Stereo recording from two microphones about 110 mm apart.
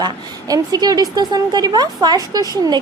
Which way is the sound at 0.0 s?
35° right (ahead or behind).